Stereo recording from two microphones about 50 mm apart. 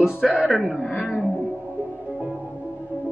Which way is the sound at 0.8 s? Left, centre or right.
Left.